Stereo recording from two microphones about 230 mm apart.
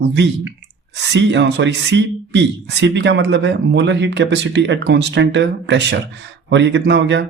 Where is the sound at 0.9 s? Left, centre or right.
Right.